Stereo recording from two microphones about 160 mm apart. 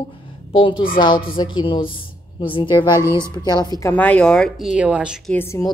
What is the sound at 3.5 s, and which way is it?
A woman's voice, 25° left (ahead or behind).